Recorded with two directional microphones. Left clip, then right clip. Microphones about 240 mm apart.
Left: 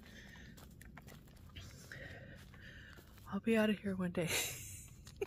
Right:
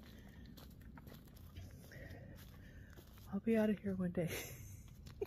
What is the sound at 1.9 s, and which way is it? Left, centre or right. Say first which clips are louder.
Music: left 5 dB; centre.